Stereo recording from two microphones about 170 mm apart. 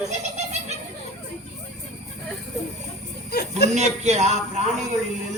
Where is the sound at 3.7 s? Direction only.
40° right (ahead or behind).